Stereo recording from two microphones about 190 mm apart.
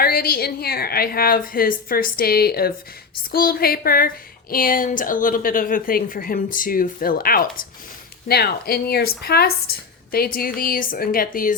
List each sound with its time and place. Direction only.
0.0 s speech: 50° left (ahead or behind)